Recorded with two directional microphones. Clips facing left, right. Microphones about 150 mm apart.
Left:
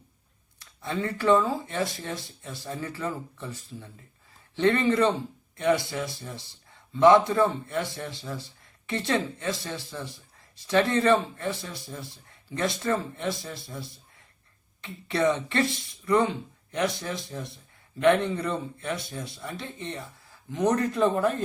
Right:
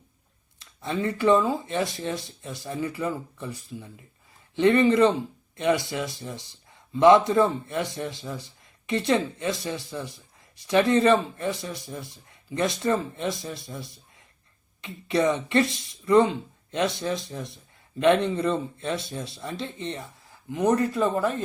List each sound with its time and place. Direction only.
0.6 s speech: 20° right (ahead or behind)
20.5 s speech: 10° right (ahead or behind)